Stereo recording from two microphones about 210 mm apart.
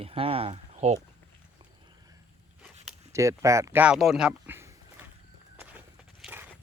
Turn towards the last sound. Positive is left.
turn(degrees=-10)  # may be behind; listen again after turning